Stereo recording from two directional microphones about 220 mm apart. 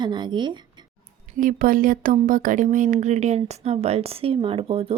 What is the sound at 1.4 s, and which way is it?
Speech, 40° right (ahead or behind).